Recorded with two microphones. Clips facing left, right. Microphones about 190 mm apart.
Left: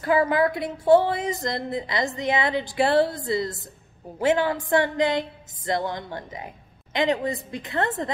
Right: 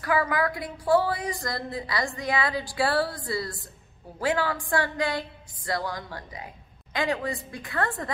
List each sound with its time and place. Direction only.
0.0 s a woman's voice: 25° left (ahead or behind)